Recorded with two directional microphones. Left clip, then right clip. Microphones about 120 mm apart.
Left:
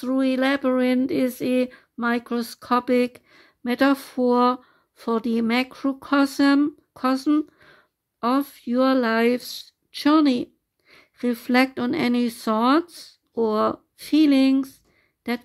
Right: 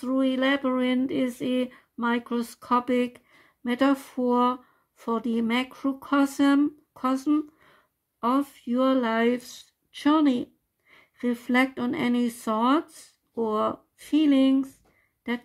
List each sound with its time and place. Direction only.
0.0 s a woman's voice: 30° left (ahead or behind)